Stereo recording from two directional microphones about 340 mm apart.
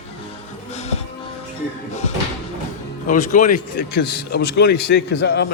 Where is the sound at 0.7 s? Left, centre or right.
Centre.